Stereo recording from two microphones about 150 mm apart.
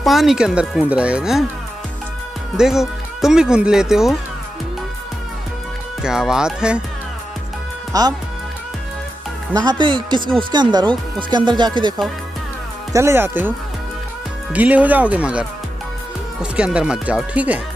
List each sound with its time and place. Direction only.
0.0 s speech: centre (ahead or behind)
2.5 s speech: 5° right (ahead or behind)
6.0 s speech: 5° right (ahead or behind)
7.9 s speech: 25° right (ahead or behind)
9.5 s speech: 25° right (ahead or behind)
12.9 s speech: 15° right (ahead or behind)